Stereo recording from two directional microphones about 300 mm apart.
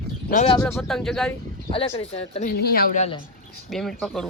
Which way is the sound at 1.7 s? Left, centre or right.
Centre.